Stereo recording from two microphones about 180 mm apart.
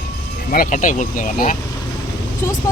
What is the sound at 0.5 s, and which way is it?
Speech, 50° left (ahead or behind).